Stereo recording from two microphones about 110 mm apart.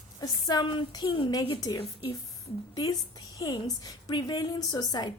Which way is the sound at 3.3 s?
35° left (ahead or behind).